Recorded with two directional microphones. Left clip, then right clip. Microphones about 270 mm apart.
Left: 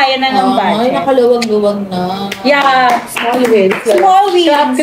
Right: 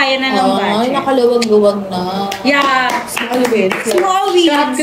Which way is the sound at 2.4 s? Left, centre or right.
Centre.